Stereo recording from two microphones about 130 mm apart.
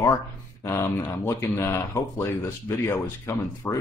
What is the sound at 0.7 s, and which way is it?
Speech, 20° left (ahead or behind).